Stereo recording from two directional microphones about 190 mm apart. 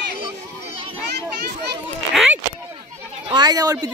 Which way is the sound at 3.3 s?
20° right (ahead or behind).